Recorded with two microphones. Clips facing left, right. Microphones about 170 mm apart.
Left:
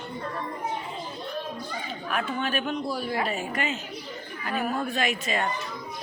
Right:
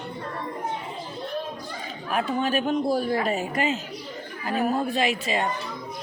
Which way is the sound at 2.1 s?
35° right (ahead or behind).